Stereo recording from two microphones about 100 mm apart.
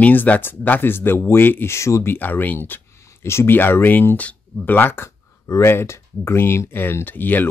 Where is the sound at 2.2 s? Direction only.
20° left (ahead or behind).